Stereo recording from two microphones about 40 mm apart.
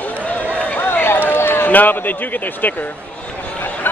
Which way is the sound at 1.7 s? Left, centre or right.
Left.